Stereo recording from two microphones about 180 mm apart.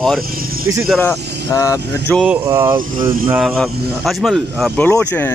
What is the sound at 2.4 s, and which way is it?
Speech, 20° right (ahead or behind).